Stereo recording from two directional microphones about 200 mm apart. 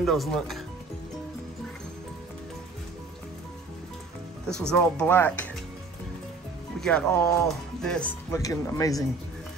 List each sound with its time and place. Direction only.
0.0 s speech: centre (ahead or behind)
4.5 s speech: 5° left (ahead or behind)
6.8 s speech: 5° left (ahead or behind)
8.3 s speech: 15° left (ahead or behind)